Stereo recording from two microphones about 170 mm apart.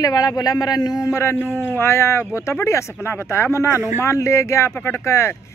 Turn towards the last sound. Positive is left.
turn(degrees=15)  # may be behind; listen again after turning